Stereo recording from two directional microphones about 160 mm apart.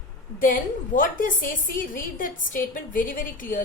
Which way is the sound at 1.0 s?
60° left (ahead or behind).